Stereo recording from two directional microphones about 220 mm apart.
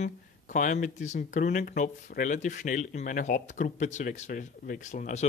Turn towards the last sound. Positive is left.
turn(degrees=35)  # may be behind; listen again after turning